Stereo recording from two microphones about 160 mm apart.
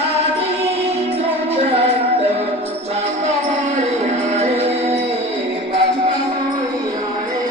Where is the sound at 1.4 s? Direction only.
40° right (ahead or behind).